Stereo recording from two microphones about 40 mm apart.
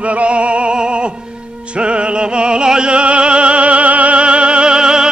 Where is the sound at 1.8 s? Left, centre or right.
Right.